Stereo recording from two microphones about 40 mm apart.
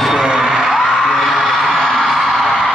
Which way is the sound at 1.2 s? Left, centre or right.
Centre.